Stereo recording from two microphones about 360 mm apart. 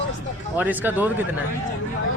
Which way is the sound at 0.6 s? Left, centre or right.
Centre.